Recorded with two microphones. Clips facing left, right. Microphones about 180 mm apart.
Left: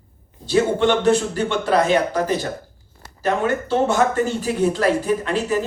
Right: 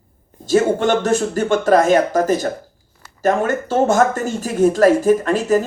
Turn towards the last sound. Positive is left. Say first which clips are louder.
# right 5 dB
turn(degrees=-45)  # may be behind; listen again after turning